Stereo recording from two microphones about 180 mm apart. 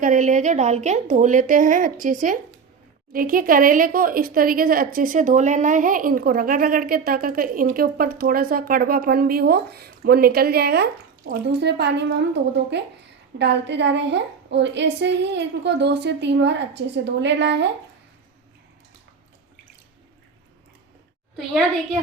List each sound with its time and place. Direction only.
0.0 s a woman's voice: 45° right (ahead or behind); by 17.7 s 75° right (ahead or behind)